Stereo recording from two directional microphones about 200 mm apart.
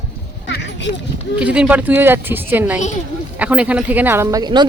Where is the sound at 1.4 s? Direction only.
5° right (ahead or behind).